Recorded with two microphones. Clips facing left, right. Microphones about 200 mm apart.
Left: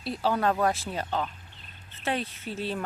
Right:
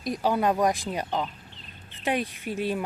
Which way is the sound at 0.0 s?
15° right (ahead or behind).